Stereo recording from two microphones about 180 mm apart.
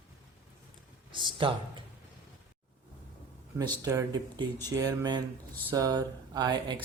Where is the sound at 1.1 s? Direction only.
25° right (ahead or behind).